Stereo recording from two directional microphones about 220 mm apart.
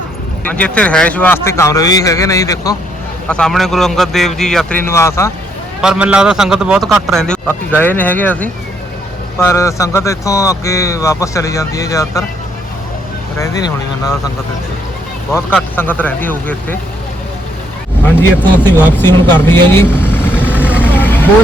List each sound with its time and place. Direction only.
0.4 s speech: 5° left (ahead or behind)
3.2 s a man's voice: 5° left (ahead or behind)
5.8 s a man's voice: 5° right (ahead or behind); by 12.2 s 15° left (ahead or behind)
13.4 s speech: 15° left (ahead or behind)
15.7 s speech: 10° left (ahead or behind)
18.3 s speech: 10° left (ahead or behind)
20.6 s speech: 5° right (ahead or behind)
20.8 s vehicle: 10° left (ahead or behind)